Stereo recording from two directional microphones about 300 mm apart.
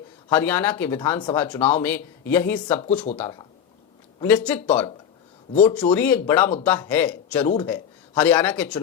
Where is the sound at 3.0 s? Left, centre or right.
Centre.